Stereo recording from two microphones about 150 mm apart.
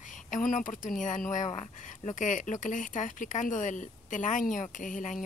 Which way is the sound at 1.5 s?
40° left (ahead or behind).